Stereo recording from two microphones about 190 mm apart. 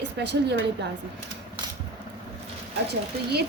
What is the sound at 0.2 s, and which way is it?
Speech, 65° right (ahead or behind).